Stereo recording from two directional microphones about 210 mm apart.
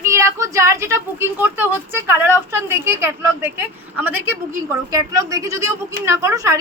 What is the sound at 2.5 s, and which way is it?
A woman's voice, 10° right (ahead or behind).